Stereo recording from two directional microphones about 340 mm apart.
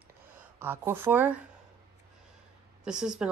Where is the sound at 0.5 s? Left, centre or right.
Centre.